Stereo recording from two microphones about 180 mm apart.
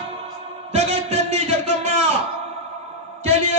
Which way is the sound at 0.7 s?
40° right (ahead or behind).